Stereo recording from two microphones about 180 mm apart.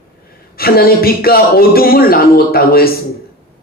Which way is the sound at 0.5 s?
55° left (ahead or behind).